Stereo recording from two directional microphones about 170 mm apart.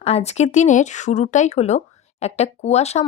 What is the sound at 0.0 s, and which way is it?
A woman's voice, 40° left (ahead or behind).